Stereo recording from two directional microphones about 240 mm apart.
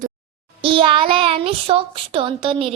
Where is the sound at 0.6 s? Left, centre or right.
Right.